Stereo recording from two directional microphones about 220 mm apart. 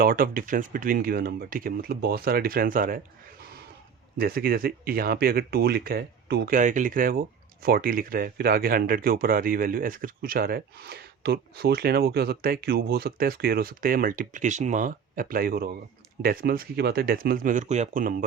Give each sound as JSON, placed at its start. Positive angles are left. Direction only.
{"t": 0.0, "sound": "speech", "side_deg": -40}
{"t": 4.2, "sound": "speech", "side_deg": -40}